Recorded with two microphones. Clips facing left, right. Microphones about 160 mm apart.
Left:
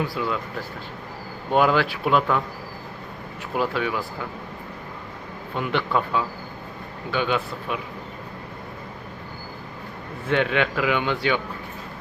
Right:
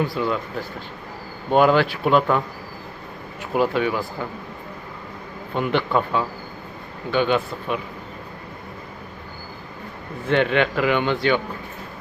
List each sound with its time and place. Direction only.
0.0 s a man's voice: 5° left (ahead or behind)
1.5 s a man's voice: centre (ahead or behind)
3.5 s a man's voice: centre (ahead or behind)
5.5 s a man's voice: centre (ahead or behind)
10.2 s a man's voice: 5° left (ahead or behind)